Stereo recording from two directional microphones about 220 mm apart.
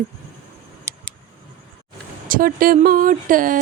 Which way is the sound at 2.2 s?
40° right (ahead or behind).